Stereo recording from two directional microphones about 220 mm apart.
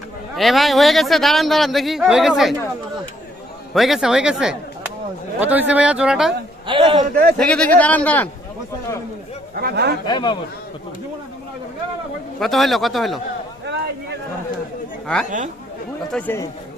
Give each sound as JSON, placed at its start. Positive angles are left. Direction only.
{"t": 0.3, "sound": "a man's voice", "side_deg": 0}
{"t": 3.8, "sound": "a man's voice", "side_deg": 0}
{"t": 6.7, "sound": "a man's voice", "side_deg": -20}
{"t": 7.3, "sound": "speech", "side_deg": 5}
{"t": 9.6, "sound": "speech", "side_deg": -45}
{"t": 10.1, "sound": "a man's voice", "side_deg": 20}
{"t": 12.4, "sound": "a man's voice", "side_deg": 0}
{"t": 15.0, "sound": "speech", "side_deg": 5}